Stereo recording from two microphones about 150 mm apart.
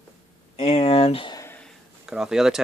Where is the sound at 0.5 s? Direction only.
45° left (ahead or behind).